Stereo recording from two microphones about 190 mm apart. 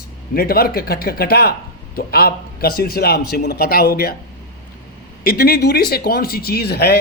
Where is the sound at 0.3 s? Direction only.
55° left (ahead or behind).